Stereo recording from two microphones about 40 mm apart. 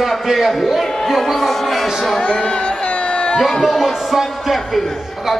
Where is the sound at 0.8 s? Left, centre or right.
Centre.